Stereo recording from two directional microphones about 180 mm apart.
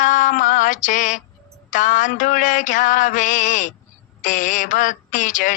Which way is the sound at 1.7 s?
45° left (ahead or behind).